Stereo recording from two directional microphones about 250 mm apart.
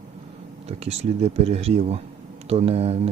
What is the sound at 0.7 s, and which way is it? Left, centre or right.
Speech, right.